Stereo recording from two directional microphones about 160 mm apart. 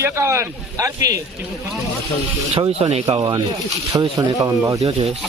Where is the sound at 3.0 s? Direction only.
25° right (ahead or behind).